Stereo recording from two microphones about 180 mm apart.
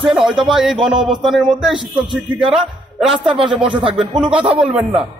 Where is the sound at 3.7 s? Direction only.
30° right (ahead or behind).